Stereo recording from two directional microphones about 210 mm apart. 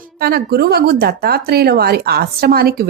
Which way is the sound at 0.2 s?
50° right (ahead or behind).